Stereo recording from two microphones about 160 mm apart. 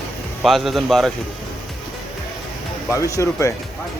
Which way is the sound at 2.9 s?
20° left (ahead or behind).